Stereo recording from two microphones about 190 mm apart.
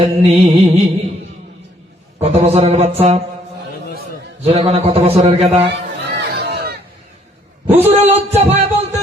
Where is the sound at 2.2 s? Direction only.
35° right (ahead or behind).